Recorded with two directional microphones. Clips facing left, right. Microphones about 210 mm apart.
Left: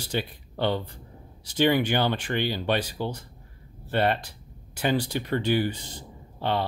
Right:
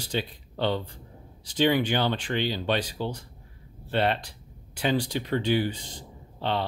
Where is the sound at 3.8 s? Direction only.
50° left (ahead or behind).